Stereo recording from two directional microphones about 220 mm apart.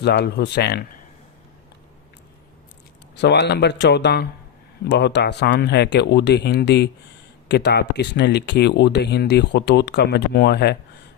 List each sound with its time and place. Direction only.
0.0 s speech: 50° left (ahead or behind)
3.2 s speech: 50° left (ahead or behind)